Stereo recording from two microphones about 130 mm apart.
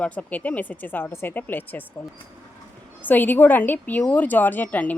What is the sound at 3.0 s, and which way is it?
Speech, 15° left (ahead or behind).